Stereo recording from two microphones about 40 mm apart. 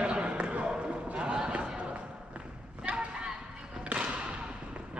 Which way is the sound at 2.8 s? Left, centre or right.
Right.